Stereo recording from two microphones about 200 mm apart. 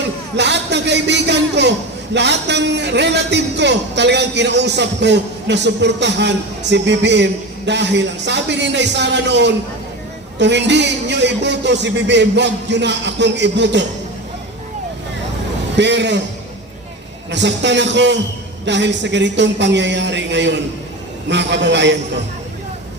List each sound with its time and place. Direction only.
0.3 s a sound: 60° right (ahead or behind)
2.1 s a man's voice: 60° right (ahead or behind)
15.7 s a man's voice: 60° right (ahead or behind)
17.3 s a man's voice: 60° right (ahead or behind)